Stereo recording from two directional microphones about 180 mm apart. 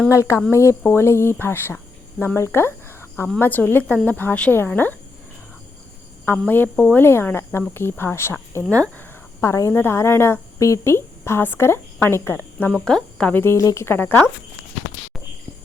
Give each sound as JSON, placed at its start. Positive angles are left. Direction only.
{"t": 0.1, "sound": "speech", "side_deg": 15}
{"t": 6.2, "sound": "speech", "side_deg": 10}